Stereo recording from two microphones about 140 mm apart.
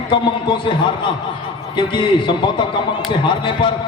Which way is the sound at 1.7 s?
35° left (ahead or behind).